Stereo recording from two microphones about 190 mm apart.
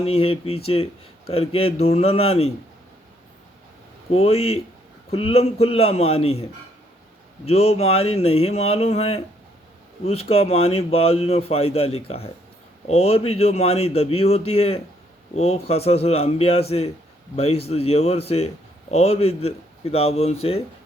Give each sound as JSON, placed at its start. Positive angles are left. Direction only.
{"t": 0.0, "sound": "a man's voice", "side_deg": 30}
{"t": 4.1, "sound": "a man's voice", "side_deg": 30}
{"t": 7.4, "sound": "a man's voice", "side_deg": 35}